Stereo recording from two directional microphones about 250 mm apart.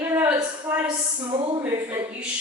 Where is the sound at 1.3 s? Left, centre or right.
Centre.